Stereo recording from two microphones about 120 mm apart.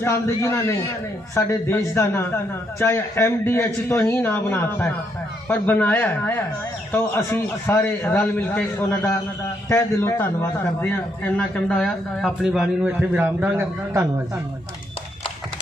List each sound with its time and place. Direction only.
0.0 s a man's voice: 25° left (ahead or behind)
12.2 s a man's voice: 5° right (ahead or behind)